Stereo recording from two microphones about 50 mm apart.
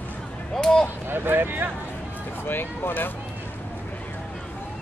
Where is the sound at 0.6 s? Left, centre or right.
Centre.